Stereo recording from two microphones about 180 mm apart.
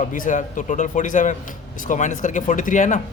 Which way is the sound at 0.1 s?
45° left (ahead or behind).